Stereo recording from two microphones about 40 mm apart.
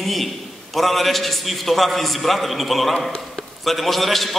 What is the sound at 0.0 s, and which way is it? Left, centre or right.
A man's voice, centre.